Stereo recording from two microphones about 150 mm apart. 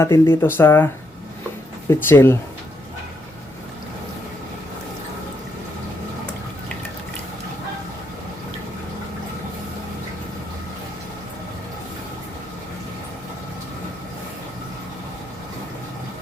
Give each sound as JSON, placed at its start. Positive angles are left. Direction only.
{"t": 0.0, "sound": "speech", "side_deg": 15}
{"t": 1.9, "sound": "speech", "side_deg": 15}